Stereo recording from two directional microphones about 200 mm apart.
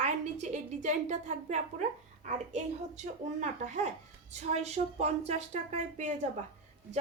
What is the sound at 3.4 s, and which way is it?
Speech, 35° right (ahead or behind).